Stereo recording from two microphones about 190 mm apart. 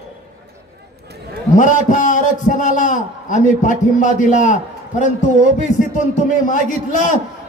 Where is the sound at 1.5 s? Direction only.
45° left (ahead or behind).